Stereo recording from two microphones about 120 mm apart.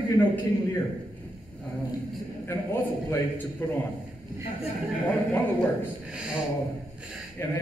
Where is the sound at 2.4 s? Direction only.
25° left (ahead or behind).